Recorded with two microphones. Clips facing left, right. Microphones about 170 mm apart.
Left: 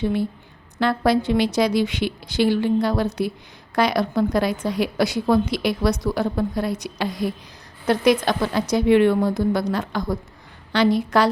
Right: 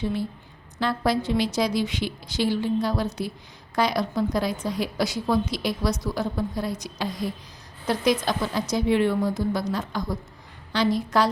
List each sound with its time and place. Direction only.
0.0 s a woman's voice: 60° left (ahead or behind)